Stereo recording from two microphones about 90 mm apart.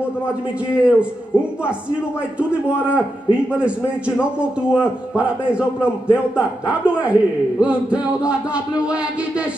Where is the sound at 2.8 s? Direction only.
10° right (ahead or behind).